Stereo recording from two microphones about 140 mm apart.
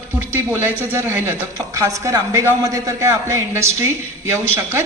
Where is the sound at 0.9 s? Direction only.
15° right (ahead or behind).